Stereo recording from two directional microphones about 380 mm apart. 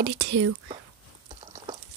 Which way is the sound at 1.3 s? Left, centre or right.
Centre.